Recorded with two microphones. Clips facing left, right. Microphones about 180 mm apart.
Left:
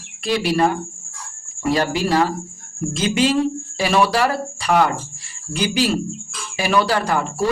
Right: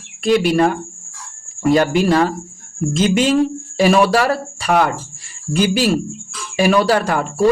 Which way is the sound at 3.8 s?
45° right (ahead or behind).